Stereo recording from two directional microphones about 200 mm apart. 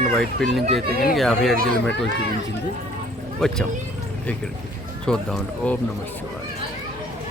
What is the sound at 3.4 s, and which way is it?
Speech, centre (ahead or behind).